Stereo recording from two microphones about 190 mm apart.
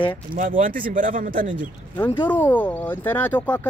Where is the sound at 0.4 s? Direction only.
45° right (ahead or behind).